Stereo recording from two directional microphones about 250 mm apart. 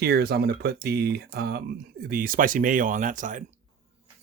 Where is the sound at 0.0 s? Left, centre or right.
Right.